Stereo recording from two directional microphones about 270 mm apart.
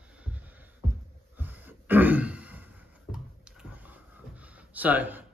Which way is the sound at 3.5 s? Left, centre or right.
Centre.